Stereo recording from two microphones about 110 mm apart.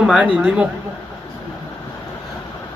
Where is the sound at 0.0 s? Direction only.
5° right (ahead or behind).